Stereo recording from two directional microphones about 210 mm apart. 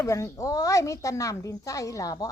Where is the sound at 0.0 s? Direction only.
15° left (ahead or behind).